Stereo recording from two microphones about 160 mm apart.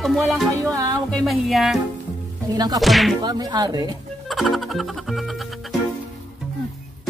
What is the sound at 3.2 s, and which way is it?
Speech, 25° right (ahead or behind).